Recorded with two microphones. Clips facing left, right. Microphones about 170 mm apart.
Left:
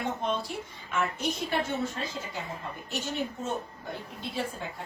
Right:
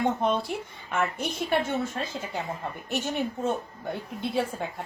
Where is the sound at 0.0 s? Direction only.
55° right (ahead or behind).